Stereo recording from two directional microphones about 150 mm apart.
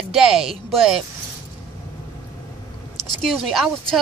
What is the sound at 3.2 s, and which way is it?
Speech, centre (ahead or behind).